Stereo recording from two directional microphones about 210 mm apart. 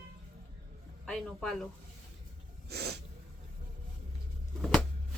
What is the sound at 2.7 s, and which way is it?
Sneeze, 50° right (ahead or behind).